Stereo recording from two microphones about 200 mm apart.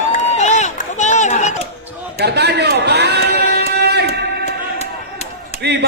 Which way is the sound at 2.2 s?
55° right (ahead or behind).